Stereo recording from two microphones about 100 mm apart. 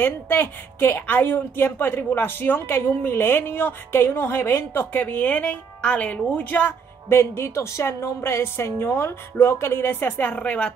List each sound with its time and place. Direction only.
0.0 s speech: 20° left (ahead or behind)